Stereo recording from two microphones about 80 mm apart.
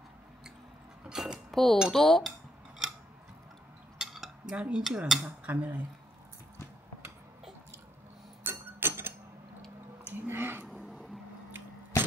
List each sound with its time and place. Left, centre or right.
1.0 s speech: centre
1.5 s speech: centre
1.9 s dishes: centre
4.0 s cutlery: centre
4.6 s speech: centre
4.8 s dishes: centre
5.2 s speech: centre
8.5 s a sound: right
10.7 s a sound: centre